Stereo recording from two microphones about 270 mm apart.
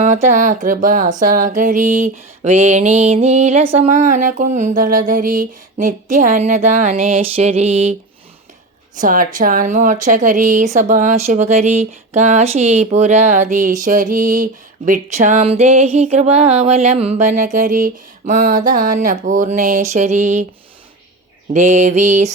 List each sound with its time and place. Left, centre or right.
0.0 s a woman's voice: right
9.0 s a woman's voice: right
21.5 s a woman's voice: right